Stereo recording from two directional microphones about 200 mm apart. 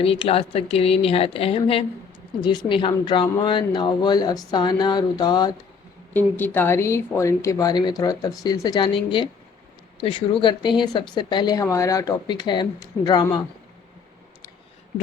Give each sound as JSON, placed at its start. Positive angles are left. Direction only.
{"t": 0.0, "sound": "speech", "side_deg": 30}
{"t": 6.1, "sound": "speech", "side_deg": 10}